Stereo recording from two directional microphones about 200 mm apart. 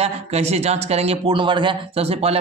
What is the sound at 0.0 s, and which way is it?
A man's voice, 30° right (ahead or behind).